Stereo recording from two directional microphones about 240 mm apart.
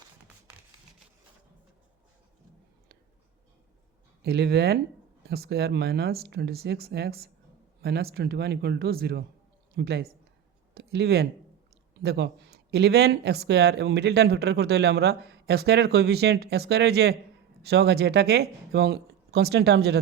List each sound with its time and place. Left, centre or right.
4.2 s speech: right